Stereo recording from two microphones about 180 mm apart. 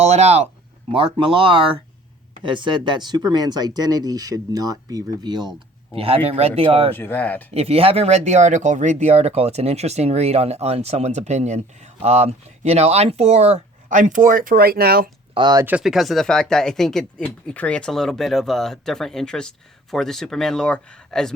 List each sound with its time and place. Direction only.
0.0 s speech: 35° right (ahead or behind)
6.9 s speech: 10° left (ahead or behind)
7.5 s speech: 35° right (ahead or behind); by 15.1 s 55° right (ahead or behind)
15.4 s speech: 25° right (ahead or behind)
15.6 s speech: 5° right (ahead or behind)